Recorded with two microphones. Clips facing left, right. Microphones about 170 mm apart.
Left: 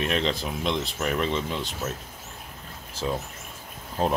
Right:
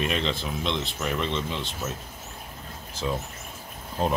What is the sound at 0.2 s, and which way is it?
Speech, 40° left (ahead or behind).